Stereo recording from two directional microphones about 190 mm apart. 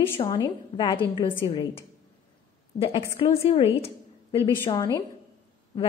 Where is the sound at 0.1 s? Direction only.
20° left (ahead or behind).